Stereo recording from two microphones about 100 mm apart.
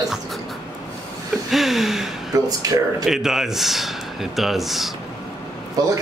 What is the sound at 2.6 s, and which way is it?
Speech, 35° right (ahead or behind).